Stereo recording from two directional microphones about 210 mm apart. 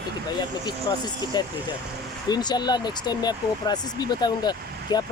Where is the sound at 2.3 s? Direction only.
20° left (ahead or behind).